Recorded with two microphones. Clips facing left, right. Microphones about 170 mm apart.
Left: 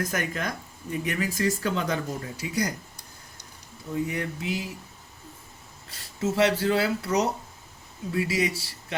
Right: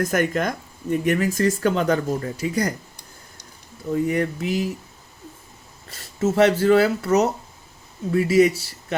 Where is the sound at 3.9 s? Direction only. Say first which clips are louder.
Right 8 dB; 50° right (ahead or behind).